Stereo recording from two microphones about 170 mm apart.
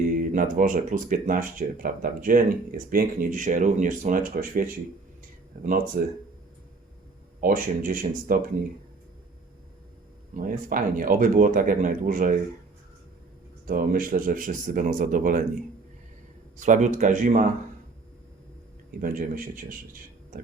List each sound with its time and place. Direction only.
0.2 s speech: 50° right (ahead or behind)
6.0 s speech: 65° right (ahead or behind)
7.4 s speech: 55° right (ahead or behind)
10.3 s speech: 55° right (ahead or behind)
13.7 s speech: 55° right (ahead or behind)
16.6 s speech: 45° right (ahead or behind)
18.9 s speech: 55° right (ahead or behind)